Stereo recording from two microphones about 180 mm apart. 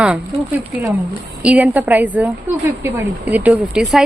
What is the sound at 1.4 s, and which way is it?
A woman's voice, 5° right (ahead or behind).